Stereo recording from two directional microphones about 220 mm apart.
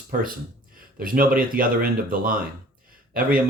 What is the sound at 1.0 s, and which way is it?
Speech, 40° right (ahead or behind).